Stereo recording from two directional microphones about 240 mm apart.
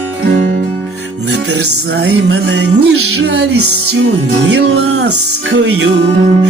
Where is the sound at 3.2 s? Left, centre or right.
Right.